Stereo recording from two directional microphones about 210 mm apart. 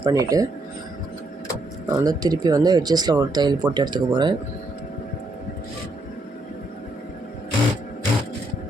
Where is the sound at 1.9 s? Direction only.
15° right (ahead or behind).